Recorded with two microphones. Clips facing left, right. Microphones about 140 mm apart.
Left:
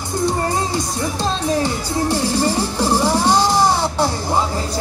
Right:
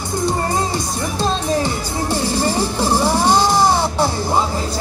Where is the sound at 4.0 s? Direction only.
10° right (ahead or behind).